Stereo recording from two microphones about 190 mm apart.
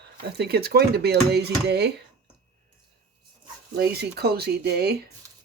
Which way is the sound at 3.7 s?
55° right (ahead or behind).